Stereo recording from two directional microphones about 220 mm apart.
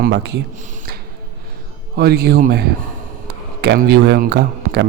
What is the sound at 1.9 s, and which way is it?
A man's voice, 45° right (ahead or behind).